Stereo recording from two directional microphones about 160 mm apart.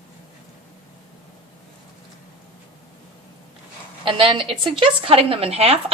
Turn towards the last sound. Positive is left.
turn(degrees=-40)  # may be behind; listen again after turning